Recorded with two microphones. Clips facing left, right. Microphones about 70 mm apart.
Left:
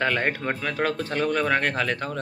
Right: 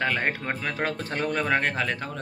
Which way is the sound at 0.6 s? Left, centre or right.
Right.